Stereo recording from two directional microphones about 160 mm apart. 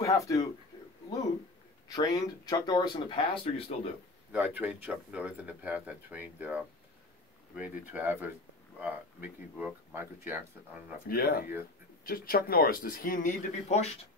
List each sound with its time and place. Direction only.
0.0 s speech: 20° left (ahead or behind)
1.9 s speech: 25° left (ahead or behind)
4.6 s speech: 5° right (ahead or behind)
11.1 s speech: 75° left (ahead or behind); by 13.9 s 40° left (ahead or behind)